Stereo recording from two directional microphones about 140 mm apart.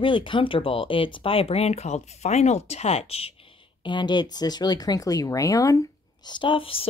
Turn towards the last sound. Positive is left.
turn(degrees=40)  # may be behind; listen again after turning